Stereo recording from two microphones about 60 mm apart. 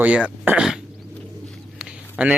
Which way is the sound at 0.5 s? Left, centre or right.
Right.